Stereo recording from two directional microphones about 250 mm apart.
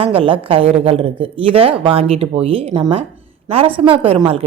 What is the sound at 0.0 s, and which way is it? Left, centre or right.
A woman's voice, right.